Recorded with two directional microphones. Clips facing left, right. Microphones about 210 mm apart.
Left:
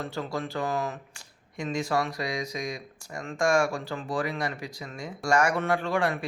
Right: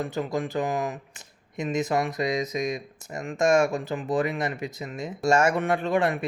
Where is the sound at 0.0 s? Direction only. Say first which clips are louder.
Right 4 dB; 15° right (ahead or behind).